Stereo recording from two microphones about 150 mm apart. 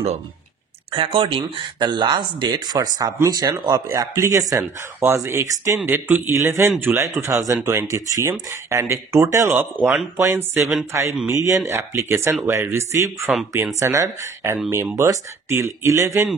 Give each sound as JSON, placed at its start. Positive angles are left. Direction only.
{"t": 0.9, "sound": "speech", "side_deg": -35}
{"t": 10.6, "sound": "speech", "side_deg": -5}
{"t": 10.9, "sound": "speech", "side_deg": -20}